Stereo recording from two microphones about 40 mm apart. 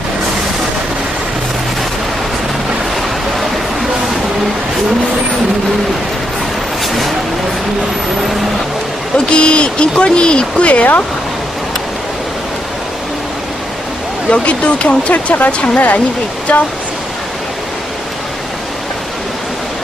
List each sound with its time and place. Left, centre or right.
9.1 s speech: left
14.3 s speech: left